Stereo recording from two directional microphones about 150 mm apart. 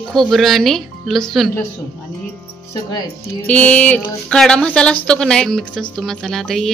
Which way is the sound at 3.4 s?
10° left (ahead or behind).